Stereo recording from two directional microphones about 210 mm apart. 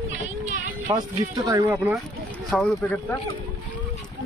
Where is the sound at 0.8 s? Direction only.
15° right (ahead or behind).